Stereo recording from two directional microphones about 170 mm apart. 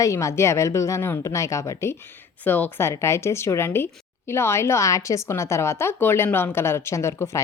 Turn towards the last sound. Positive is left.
turn(degrees=15)  # may be behind; listen again after turning